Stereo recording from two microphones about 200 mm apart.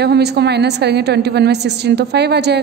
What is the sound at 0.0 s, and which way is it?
A woman's voice, 55° right (ahead or behind).